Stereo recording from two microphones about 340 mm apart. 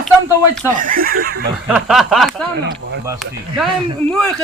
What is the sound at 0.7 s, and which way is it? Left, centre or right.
Speech, right.